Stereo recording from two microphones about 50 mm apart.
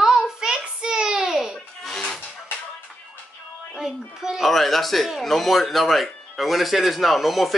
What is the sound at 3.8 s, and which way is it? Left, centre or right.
Speech, centre.